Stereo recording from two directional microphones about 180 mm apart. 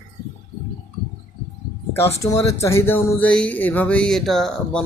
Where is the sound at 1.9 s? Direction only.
15° left (ahead or behind).